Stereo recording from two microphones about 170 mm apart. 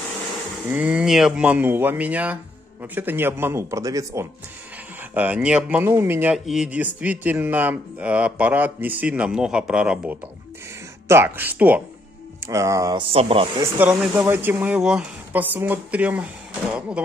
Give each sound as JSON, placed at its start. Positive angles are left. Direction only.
{"t": 0.7, "sound": "speech", "side_deg": -5}
{"t": 6.3, "sound": "speech", "side_deg": 0}
{"t": 13.1, "sound": "speech", "side_deg": -35}
{"t": 13.6, "sound": "speech", "side_deg": -5}